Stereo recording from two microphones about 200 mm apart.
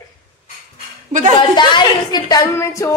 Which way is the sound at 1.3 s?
20° left (ahead or behind).